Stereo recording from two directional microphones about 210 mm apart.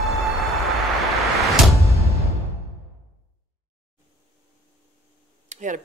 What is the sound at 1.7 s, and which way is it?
Music, 15° right (ahead or behind).